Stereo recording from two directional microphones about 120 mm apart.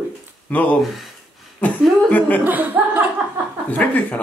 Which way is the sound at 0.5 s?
10° left (ahead or behind).